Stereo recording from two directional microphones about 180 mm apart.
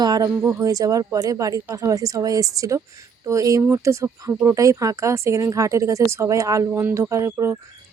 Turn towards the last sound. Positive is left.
turn(degrees=-15)  # may be behind; listen again after turning